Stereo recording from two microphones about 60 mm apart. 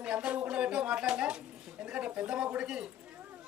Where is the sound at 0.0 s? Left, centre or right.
Centre.